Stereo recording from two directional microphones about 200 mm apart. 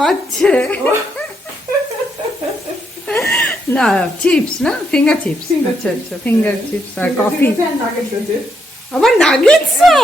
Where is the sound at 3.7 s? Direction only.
5° left (ahead or behind).